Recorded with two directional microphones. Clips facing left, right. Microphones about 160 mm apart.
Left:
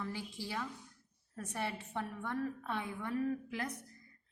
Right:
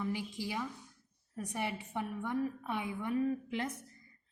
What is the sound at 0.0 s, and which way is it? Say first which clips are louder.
A woman's voice: right 5 dB; 15° right (ahead or behind).